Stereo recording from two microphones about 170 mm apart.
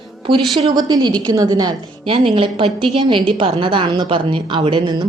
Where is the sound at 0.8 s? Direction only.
20° right (ahead or behind).